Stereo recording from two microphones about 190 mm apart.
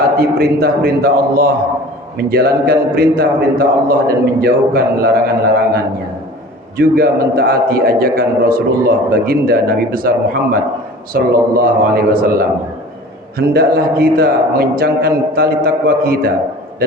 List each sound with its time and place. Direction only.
0.2 s a man's voice: 55° right (ahead or behind)